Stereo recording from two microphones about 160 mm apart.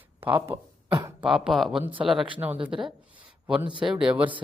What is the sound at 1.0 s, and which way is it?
Speech, 15° right (ahead or behind).